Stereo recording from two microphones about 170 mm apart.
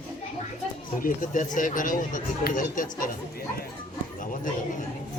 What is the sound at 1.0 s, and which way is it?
Speech, 50° left (ahead or behind).